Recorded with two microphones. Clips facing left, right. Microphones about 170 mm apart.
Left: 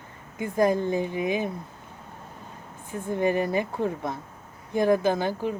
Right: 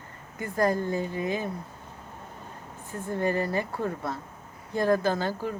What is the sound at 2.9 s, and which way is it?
Speech, 15° left (ahead or behind).